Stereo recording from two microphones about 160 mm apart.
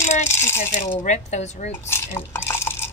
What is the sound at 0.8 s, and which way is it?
Speech, 45° left (ahead or behind).